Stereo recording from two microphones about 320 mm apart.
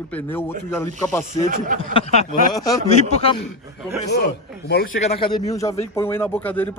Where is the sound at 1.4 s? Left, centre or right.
Right.